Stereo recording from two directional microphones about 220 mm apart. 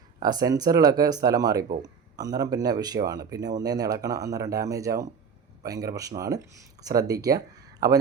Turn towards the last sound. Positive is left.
turn(degrees=-15)  # may be behind; listen again after turning